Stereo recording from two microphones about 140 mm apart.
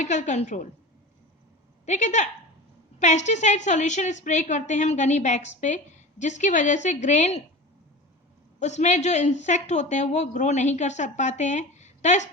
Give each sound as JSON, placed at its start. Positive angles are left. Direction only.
{"t": 0.0, "sound": "a woman's voice", "side_deg": 60}
{"t": 1.9, "sound": "a woman's voice", "side_deg": 60}
{"t": 8.5, "sound": "a woman's voice", "side_deg": 55}